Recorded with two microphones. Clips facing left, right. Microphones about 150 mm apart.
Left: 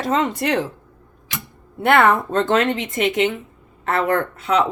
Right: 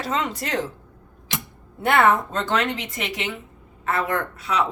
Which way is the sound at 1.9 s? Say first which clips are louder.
Left 3 dB; 60° left (ahead or behind).